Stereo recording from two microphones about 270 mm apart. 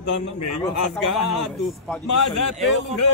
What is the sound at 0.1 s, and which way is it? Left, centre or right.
Speech, left.